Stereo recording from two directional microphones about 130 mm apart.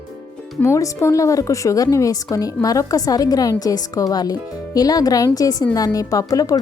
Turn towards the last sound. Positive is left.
turn(degrees=25)  # may be behind; listen again after turning